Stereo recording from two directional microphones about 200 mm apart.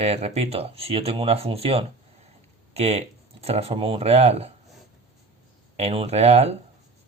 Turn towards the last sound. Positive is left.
turn(degrees=-35)  # may be behind; listen again after turning